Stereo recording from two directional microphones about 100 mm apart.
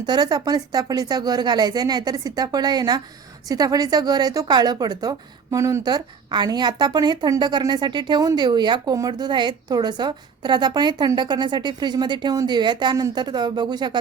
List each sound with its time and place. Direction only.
0.0 s a woman's voice: 45° right (ahead or behind)
5.8 s a woman's voice: 45° right (ahead or behind)